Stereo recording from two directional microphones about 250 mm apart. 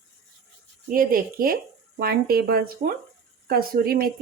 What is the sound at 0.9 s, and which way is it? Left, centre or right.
Speech, right.